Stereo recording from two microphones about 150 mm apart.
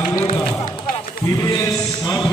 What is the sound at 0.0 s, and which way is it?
Run, 15° left (ahead or behind).